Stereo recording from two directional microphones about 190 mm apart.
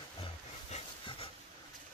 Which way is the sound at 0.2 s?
30° left (ahead or behind).